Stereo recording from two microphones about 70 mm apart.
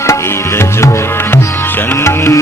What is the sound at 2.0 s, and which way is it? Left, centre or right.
Music, left.